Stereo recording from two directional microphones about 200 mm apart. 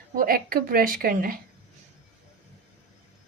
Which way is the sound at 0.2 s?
45° right (ahead or behind).